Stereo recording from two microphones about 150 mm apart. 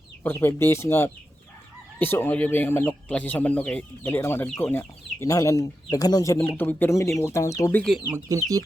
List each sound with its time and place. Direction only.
0.2 s speech: 15° left (ahead or behind)
6.4 s speech: 10° left (ahead or behind)
7.8 s speech: centre (ahead or behind)
8.1 s speech: 20° right (ahead or behind)